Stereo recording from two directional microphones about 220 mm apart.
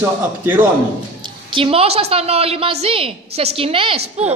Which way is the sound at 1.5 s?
25° right (ahead or behind).